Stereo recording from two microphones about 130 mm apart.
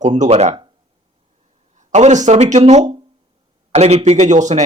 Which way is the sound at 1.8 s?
60° right (ahead or behind).